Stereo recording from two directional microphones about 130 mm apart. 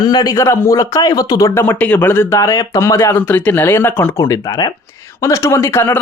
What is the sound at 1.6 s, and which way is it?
Speech, 15° left (ahead or behind).